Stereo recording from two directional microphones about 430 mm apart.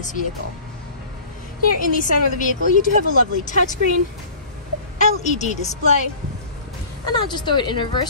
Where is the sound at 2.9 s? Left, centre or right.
Centre.